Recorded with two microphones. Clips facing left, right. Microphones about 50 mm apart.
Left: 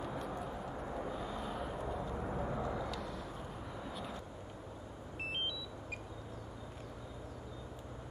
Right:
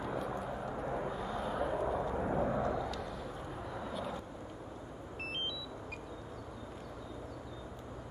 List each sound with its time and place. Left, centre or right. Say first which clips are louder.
0.0 s vehicle: right 3 dB; centre
0.8 s vehicle: right 5 dB; right
1.1 s vehicle: right 4 dB; centre
2.0 s vehicle: right 6 dB; right
2.6 s vehicle: right 4 dB; centre